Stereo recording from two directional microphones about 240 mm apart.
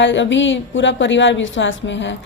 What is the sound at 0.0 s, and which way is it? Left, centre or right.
Speech, left.